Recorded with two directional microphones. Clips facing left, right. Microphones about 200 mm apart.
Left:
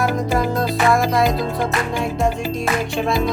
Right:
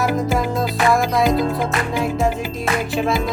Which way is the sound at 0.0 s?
Centre (ahead or behind).